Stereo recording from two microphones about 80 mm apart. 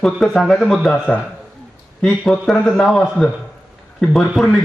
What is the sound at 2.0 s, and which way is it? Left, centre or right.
A man's voice, centre.